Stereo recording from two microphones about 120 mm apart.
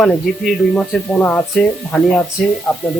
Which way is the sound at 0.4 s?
Centre (ahead or behind).